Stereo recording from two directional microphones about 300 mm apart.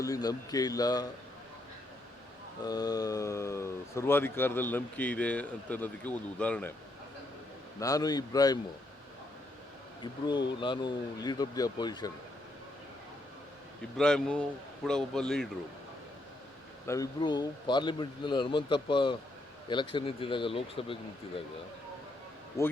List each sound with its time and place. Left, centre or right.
0.0 s speech: centre
2.6 s speech: centre
7.8 s speech: centre
10.0 s speech: centre
13.9 s a man's voice: centre
16.8 s speech: centre
22.6 s speech: centre